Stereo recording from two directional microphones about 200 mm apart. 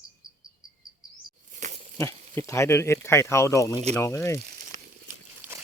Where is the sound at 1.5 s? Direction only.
40° right (ahead or behind).